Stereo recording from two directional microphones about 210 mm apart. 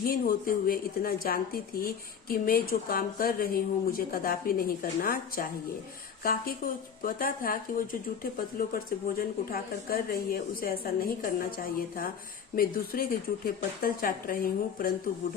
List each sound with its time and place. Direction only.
0.0 s speech: 45° left (ahead or behind)